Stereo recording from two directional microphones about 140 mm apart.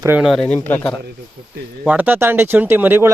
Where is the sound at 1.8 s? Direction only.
10° right (ahead or behind).